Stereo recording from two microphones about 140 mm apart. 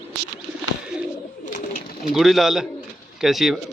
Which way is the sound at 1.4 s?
70° left (ahead or behind).